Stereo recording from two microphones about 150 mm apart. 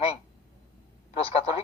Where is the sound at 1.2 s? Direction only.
40° left (ahead or behind).